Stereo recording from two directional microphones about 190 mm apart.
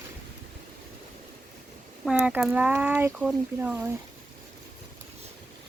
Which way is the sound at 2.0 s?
5° right (ahead or behind).